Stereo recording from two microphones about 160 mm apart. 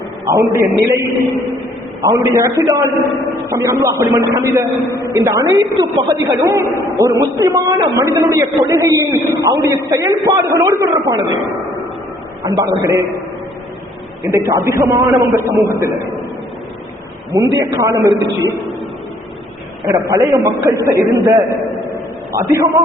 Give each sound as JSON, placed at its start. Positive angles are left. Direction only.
{"t": 0.3, "sound": "a man's voice", "side_deg": -20}
{"t": 12.5, "sound": "a man's voice", "side_deg": -20}
{"t": 14.3, "sound": "a man's voice", "side_deg": -20}
{"t": 17.7, "sound": "a man's voice", "side_deg": -20}
{"t": 19.9, "sound": "a man's voice", "side_deg": -20}
{"t": 22.3, "sound": "a man's voice", "side_deg": -20}